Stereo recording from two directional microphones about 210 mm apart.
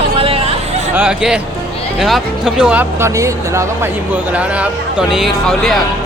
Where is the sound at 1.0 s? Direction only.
5° right (ahead or behind).